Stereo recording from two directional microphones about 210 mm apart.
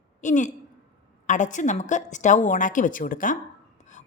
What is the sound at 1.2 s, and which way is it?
A woman's voice, 35° left (ahead or behind).